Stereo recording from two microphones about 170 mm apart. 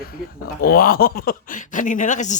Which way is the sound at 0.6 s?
60° left (ahead or behind).